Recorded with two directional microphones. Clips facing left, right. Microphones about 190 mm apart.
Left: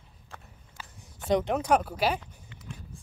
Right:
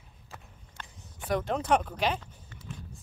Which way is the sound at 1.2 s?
20° left (ahead or behind).